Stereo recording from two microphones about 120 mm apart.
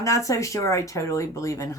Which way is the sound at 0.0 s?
25° left (ahead or behind).